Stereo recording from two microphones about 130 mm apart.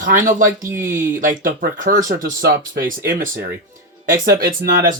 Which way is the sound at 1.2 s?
90° right.